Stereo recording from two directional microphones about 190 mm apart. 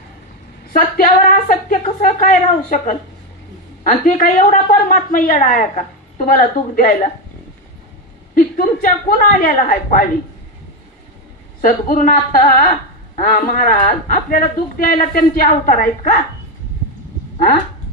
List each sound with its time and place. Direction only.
0.7 s a man's voice: 50° left (ahead or behind)
8.4 s a man's voice: 50° left (ahead or behind)
11.6 s a man's voice: 45° left (ahead or behind)